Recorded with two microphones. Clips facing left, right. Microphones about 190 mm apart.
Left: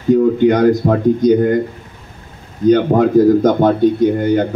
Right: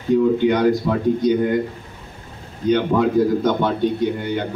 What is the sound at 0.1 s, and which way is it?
A man's voice, 45° left (ahead or behind).